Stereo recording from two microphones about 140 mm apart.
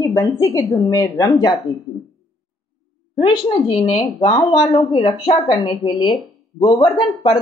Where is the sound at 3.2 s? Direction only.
35° left (ahead or behind).